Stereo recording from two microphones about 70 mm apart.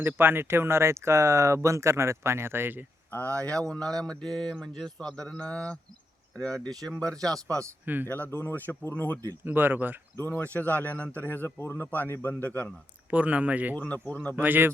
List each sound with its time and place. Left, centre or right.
0.0 s speech: right
3.1 s speech: left
3.3 s speech: centre
8.0 s a man's voice: left
9.4 s speech: right
10.2 s a man's voice: left
13.1 s speech: centre
13.7 s a man's voice: left
14.4 s speech: right